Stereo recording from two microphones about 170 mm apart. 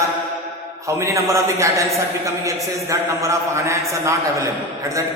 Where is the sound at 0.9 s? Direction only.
15° right (ahead or behind).